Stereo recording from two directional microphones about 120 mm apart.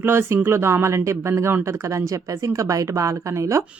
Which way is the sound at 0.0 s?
20° right (ahead or behind).